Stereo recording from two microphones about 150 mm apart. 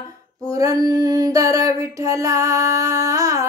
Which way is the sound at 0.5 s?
25° right (ahead or behind).